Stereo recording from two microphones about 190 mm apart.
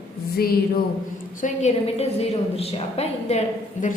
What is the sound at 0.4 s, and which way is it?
Speech, 55° left (ahead or behind).